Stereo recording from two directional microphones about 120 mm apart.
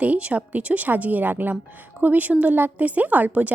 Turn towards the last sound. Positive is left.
turn(degrees=-10)  # may be behind; listen again after turning